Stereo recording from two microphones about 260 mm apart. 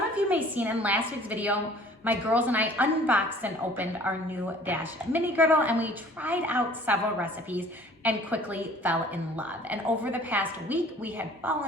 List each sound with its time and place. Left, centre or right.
0.3 s a woman's voice: centre